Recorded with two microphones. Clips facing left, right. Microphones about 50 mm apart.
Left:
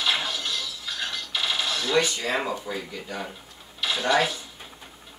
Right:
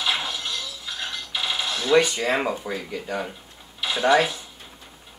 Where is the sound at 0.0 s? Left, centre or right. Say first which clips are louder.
Even; centre.